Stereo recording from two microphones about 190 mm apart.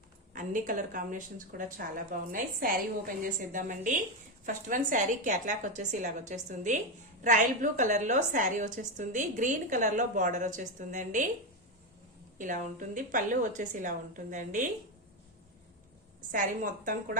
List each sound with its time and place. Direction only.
0.3 s a woman's voice: 45° right (ahead or behind)
12.4 s a woman's voice: 45° right (ahead or behind)
16.3 s a woman's voice: 45° right (ahead or behind)